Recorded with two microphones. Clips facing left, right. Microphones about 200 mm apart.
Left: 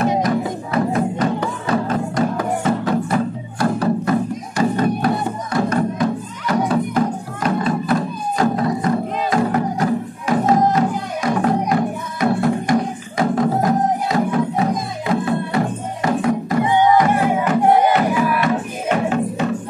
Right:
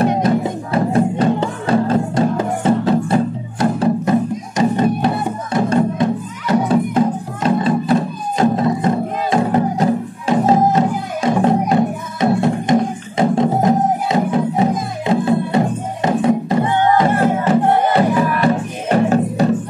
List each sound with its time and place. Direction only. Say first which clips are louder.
0.2 s music: right 3 dB; 30° right (ahead or behind)
16.6 s music: left 2 dB; 15° left (ahead or behind)
18.4 s music: right 3 dB; 35° right (ahead or behind)